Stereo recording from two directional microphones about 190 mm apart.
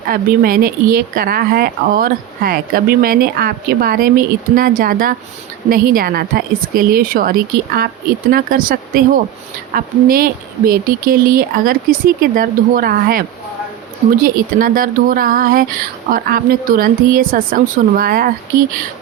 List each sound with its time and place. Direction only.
0.1 s speech: 50° right (ahead or behind)